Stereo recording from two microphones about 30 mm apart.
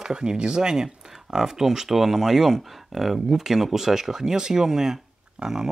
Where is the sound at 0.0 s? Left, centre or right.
Right.